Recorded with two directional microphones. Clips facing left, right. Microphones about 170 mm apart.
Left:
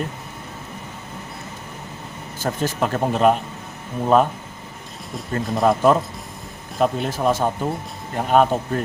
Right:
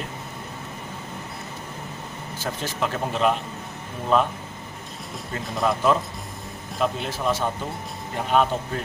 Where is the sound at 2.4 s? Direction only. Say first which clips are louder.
Left 5 dB; 45° left (ahead or behind).